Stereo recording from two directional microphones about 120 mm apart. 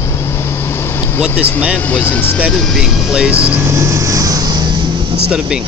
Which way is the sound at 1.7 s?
15° left (ahead or behind).